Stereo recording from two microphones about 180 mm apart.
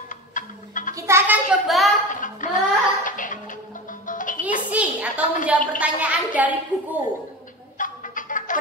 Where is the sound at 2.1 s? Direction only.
45° left (ahead or behind).